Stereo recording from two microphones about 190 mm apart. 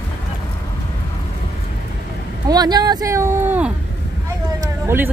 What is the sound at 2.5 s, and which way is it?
Speech, 20° right (ahead or behind).